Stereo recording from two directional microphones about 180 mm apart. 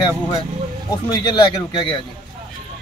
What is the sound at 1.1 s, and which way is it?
Speech, 25° left (ahead or behind).